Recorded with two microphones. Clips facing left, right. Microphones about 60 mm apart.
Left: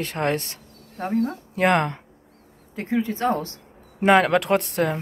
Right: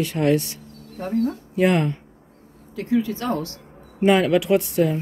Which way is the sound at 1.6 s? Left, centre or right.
Left.